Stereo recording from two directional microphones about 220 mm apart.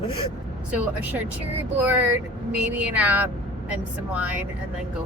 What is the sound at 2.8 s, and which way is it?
Speech, 5° right (ahead or behind).